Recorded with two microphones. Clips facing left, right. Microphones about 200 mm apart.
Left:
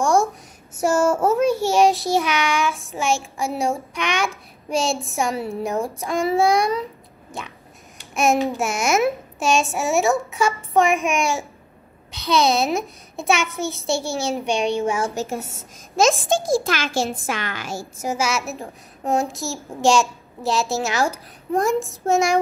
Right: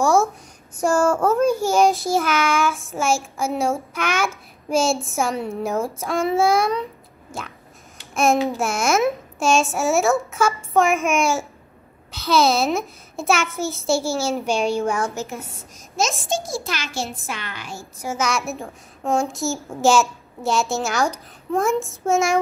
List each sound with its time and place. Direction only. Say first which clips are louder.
0.0 s a sound: right 1 dB; 5° right (ahead or behind)
0.7 s child singing: even; 5° left (ahead or behind)
16.6 s a child's voice: left 5 dB; 90° left
18.0 s child singing: even; 10° left (ahead or behind)